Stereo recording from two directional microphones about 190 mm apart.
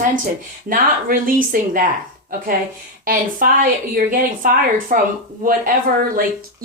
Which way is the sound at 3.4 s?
45° right (ahead or behind).